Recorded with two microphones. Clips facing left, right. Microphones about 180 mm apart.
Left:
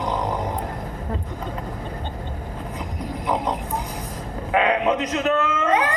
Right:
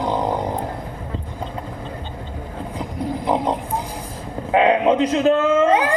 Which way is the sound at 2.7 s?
30° right (ahead or behind).